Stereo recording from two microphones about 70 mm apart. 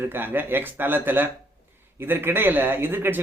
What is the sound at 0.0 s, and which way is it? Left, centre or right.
A man's voice, right.